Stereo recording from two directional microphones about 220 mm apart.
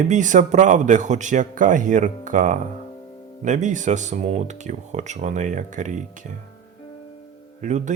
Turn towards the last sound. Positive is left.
turn(degrees=-35)  # may be behind; listen again after turning